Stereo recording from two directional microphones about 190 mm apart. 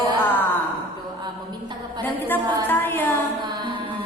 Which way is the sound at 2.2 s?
10° left (ahead or behind).